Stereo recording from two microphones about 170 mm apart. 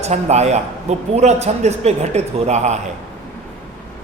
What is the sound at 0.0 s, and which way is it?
Mantra, 40° right (ahead or behind).